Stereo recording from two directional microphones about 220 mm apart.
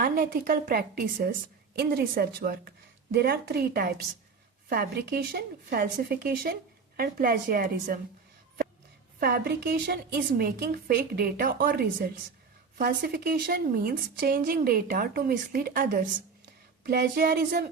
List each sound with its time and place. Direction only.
0.0 s a woman's voice: 40° right (ahead or behind)
9.2 s a woman's voice: 40° right (ahead or behind)